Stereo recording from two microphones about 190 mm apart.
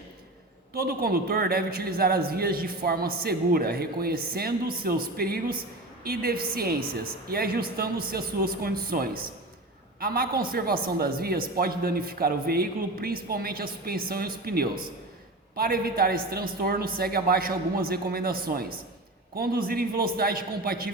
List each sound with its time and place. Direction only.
0.7 s a man's voice: 55° right (ahead or behind)